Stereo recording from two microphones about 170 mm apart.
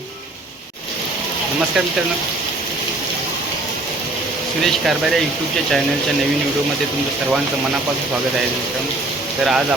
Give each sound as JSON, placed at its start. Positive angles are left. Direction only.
{"t": 4.6, "sound": "speech", "side_deg": 0}
{"t": 9.4, "sound": "speech", "side_deg": 0}